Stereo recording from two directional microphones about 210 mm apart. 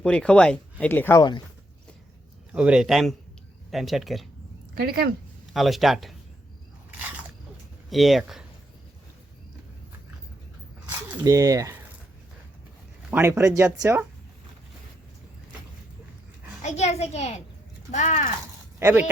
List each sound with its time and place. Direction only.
0.0 s speech: 5° left (ahead or behind)
2.5 s speech: 5° right (ahead or behind)
4.7 s speech: 45° right (ahead or behind)
5.5 s speech: centre (ahead or behind)
7.9 s speech: centre (ahead or behind)
11.2 s speech: 15° right (ahead or behind)
13.1 s speech: 10° right (ahead or behind)
16.6 s a child's voice: 35° left (ahead or behind)
18.8 s speech: 10° right (ahead or behind)